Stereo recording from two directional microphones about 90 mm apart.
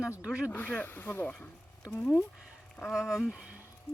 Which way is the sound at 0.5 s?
20° left (ahead or behind).